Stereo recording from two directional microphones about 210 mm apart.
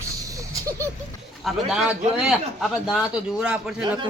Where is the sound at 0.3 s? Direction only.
15° right (ahead or behind).